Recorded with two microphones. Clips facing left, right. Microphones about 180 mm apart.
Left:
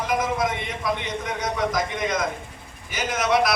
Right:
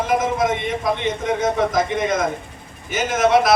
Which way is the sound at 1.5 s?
25° right (ahead or behind).